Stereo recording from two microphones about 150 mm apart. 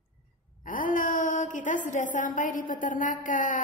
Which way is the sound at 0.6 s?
65° left (ahead or behind).